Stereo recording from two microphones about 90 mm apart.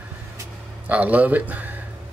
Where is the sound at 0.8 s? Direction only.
15° right (ahead or behind).